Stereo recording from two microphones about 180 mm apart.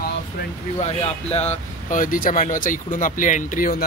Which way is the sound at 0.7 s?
35° left (ahead or behind).